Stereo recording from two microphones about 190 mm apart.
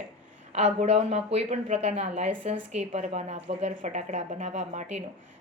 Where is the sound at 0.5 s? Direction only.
35° right (ahead or behind).